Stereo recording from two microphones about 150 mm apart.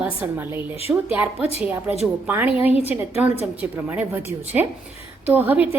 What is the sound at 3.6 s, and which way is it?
A woman's voice, 10° right (ahead or behind).